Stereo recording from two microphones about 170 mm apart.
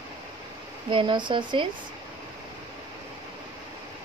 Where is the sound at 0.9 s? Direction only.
30° right (ahead or behind).